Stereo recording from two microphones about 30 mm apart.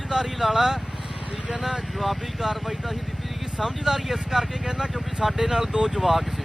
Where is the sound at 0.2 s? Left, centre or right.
Centre.